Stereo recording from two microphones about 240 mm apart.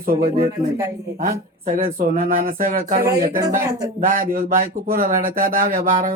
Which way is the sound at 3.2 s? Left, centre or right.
Centre.